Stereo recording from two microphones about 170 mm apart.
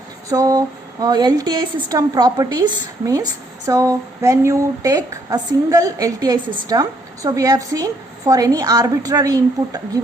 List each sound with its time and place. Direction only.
0.3 s speech: 20° right (ahead or behind)